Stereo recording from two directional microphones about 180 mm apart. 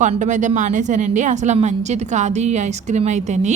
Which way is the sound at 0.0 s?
45° right (ahead or behind).